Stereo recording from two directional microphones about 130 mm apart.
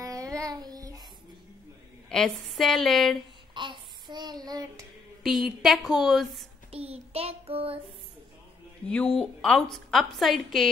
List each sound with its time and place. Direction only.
0.0 s child singing: 25° right (ahead or behind)
2.0 s a woman's voice: 5° left (ahead or behind)
3.5 s child singing: 35° right (ahead or behind)
5.2 s a woman's voice: 5° right (ahead or behind)
6.7 s child singing: 50° right (ahead or behind)
8.8 s a woman's voice: 5° left (ahead or behind)